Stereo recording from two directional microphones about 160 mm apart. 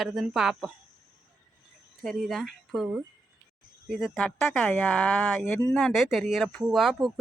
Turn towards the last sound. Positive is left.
turn(degrees=0)  # may be behind; listen again after turning